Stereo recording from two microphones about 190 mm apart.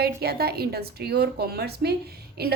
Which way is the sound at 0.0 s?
55° right (ahead or behind).